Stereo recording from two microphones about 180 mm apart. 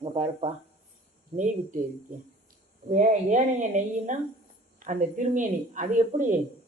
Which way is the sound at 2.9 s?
45° right (ahead or behind).